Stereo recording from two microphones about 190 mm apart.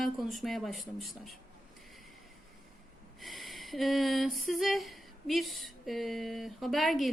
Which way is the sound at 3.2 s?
Centre (ahead or behind).